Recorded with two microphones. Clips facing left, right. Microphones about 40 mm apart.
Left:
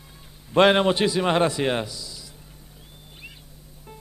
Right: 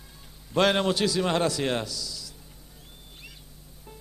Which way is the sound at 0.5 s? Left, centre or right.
Left.